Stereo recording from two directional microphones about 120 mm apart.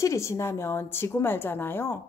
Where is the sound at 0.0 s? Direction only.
25° left (ahead or behind).